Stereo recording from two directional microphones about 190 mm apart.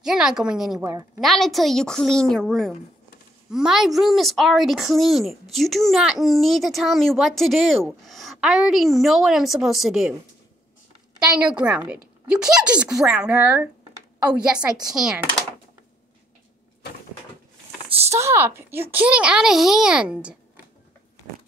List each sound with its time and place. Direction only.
0.0 s a woman's voice: 5° right (ahead or behind)
0.7 s a child's voice: 15° right (ahead or behind)
1.2 s a woman's voice: centre (ahead or behind)
11.3 s a woman's voice: 5° right (ahead or behind)
18.1 s a child's voice: 15° right (ahead or behind)